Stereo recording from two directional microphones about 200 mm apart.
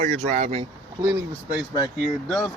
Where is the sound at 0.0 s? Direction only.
35° right (ahead or behind).